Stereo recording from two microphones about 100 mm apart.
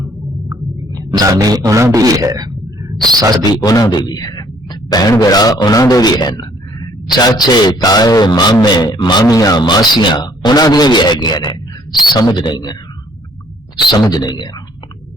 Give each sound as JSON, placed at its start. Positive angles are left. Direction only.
{"t": 0.0, "sound": "a sound", "side_deg": -30}
{"t": 1.1, "sound": "a man's voice", "side_deg": -40}
{"t": 3.6, "sound": "a man's voice", "side_deg": 40}
{"t": 13.8, "sound": "a man's voice", "side_deg": 45}